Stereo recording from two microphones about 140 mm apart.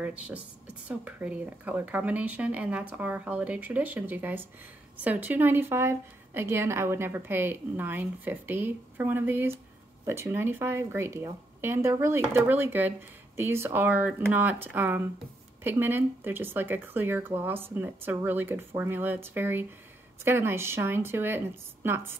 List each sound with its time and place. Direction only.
0.0 s a woman's voice: 10° right (ahead or behind)